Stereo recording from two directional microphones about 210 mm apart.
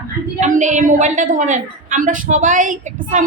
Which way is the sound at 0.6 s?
35° right (ahead or behind).